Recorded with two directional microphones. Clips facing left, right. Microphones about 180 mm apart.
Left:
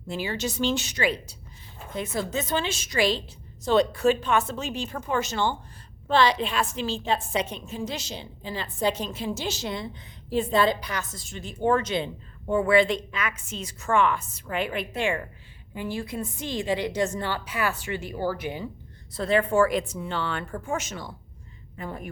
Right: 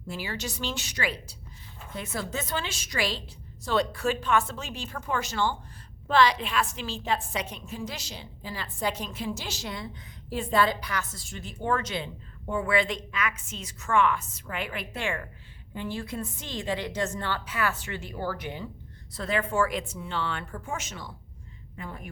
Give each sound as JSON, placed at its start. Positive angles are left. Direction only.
{"t": 0.1, "sound": "a woman's voice", "side_deg": 20}
{"t": 19.1, "sound": "a woman's voice", "side_deg": 30}